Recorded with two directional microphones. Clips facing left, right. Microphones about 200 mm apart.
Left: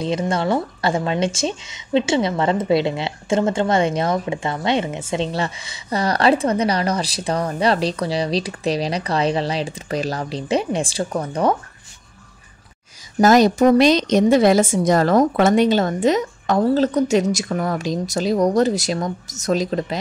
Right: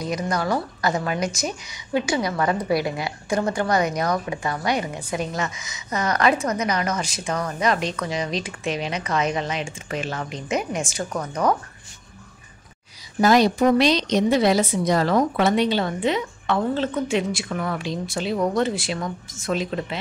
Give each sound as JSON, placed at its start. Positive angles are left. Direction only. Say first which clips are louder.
{"t": 0.0, "sound": "a woman's voice", "louder": "left 4 dB", "side_deg": 25}
{"t": 13.2, "sound": "a woman's voice", "louder": "left 4 dB", "side_deg": 45}